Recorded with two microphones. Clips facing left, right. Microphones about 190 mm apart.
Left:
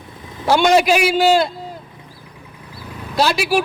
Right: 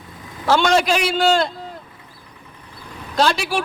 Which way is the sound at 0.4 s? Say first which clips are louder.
Left 3 dB; 15° left (ahead or behind).